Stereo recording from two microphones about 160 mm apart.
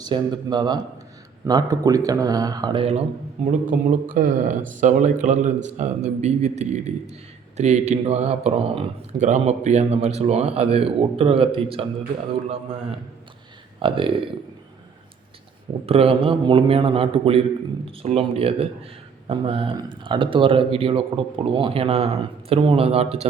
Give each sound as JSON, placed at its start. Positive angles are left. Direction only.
{"t": 0.0, "sound": "speech", "side_deg": -25}
{"t": 3.7, "sound": "speech", "side_deg": -60}
{"t": 13.7, "sound": "a man's voice", "side_deg": -35}
{"t": 15.9, "sound": "a man's voice", "side_deg": -35}